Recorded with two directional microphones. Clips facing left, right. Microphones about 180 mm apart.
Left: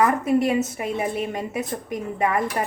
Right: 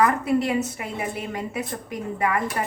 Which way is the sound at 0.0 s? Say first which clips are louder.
Left 1 dB; 20° left (ahead or behind).